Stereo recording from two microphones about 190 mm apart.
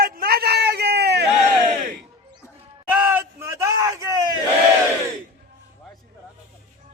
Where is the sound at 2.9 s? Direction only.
10° right (ahead or behind).